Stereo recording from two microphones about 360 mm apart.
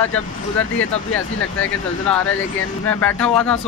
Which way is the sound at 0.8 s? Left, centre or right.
Left.